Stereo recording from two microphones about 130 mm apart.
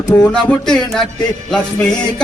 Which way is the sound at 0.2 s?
10° left (ahead or behind).